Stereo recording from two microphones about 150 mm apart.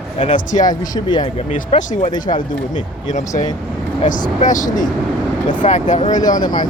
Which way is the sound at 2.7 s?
55° left (ahead or behind).